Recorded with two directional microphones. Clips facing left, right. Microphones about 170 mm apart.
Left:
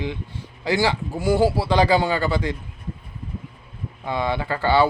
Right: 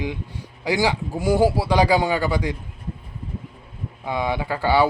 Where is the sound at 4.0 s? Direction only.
10° right (ahead or behind).